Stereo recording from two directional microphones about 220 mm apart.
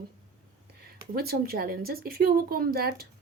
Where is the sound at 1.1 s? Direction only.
45° right (ahead or behind).